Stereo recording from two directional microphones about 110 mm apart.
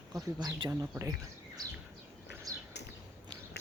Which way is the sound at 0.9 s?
30° right (ahead or behind).